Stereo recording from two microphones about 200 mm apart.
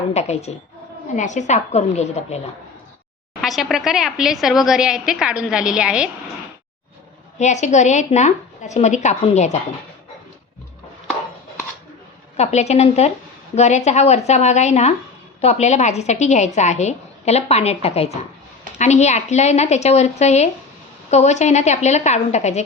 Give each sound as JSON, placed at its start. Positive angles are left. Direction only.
{"t": 0.1, "sound": "a woman's voice", "side_deg": 35}
{"t": 3.4, "sound": "a woman's voice", "side_deg": 0}
{"t": 7.3, "sound": "a woman's voice", "side_deg": 35}
{"t": 12.4, "sound": "a woman's voice", "side_deg": 35}